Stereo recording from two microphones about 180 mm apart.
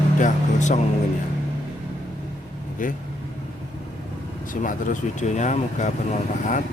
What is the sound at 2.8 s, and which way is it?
Speech, 50° left (ahead or behind).